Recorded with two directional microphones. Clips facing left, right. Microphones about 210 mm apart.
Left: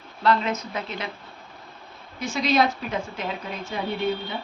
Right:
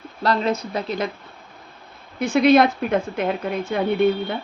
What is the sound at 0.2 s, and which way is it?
Speech, 40° right (ahead or behind).